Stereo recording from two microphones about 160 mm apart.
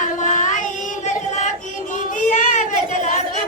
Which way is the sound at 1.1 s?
50° left (ahead or behind).